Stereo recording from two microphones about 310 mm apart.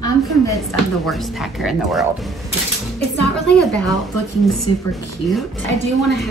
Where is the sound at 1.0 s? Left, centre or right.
Centre.